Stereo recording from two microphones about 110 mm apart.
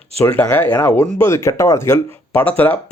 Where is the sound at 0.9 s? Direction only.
25° left (ahead or behind).